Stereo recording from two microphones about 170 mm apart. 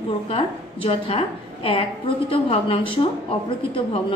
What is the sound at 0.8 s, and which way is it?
A woman's voice, 30° left (ahead or behind).